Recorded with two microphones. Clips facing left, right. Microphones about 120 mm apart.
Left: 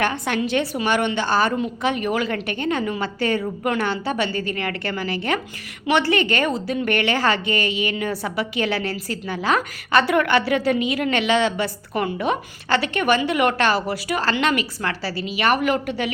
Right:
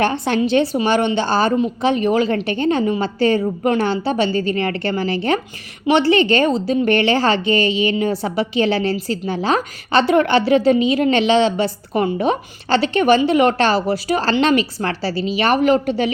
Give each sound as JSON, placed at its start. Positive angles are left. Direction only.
{"t": 0.0, "sound": "a woman's voice", "side_deg": -30}